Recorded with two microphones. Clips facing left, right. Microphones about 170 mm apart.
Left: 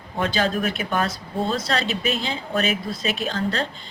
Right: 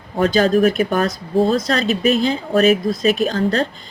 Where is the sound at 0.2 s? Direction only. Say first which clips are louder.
Right 9 dB; 40° right (ahead or behind).